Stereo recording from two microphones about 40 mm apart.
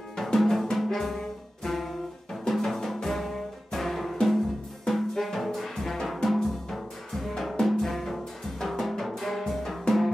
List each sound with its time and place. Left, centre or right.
0.2 s music: centre
0.7 s brass instrument: centre
2.5 s music: centre
6.2 s drum: centre
7.7 s music: centre